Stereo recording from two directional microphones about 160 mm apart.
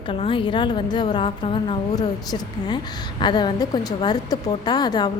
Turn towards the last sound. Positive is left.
turn(degrees=25)  # may be behind; listen again after turning